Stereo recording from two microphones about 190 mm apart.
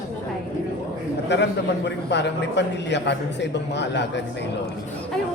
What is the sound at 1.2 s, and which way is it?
A man's voice, 65° left (ahead or behind).